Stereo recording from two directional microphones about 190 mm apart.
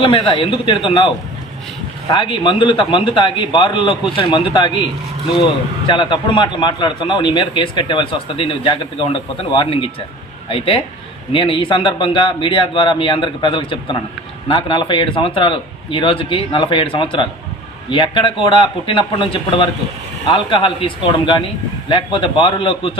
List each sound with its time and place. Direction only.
0.0 s a man's voice: 30° left (ahead or behind)
5.9 s a man's voice: 25° left (ahead or behind)